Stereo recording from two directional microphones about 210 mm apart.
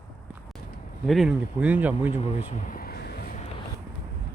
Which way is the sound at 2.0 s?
35° left (ahead or behind).